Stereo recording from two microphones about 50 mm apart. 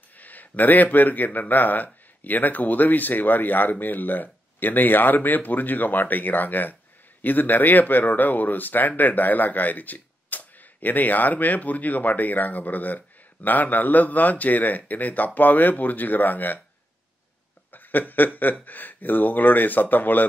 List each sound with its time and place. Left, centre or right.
0.2 s speech: left
17.6 s speech: left